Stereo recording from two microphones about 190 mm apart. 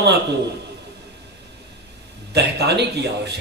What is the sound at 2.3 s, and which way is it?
A man's voice, 60° right (ahead or behind).